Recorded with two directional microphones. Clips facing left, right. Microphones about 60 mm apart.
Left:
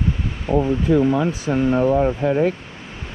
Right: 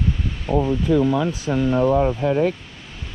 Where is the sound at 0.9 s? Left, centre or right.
Left.